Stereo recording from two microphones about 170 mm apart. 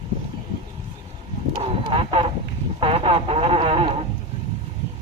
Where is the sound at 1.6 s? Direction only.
30° right (ahead or behind).